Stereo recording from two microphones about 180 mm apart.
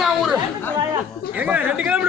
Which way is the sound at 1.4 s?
10° right (ahead or behind).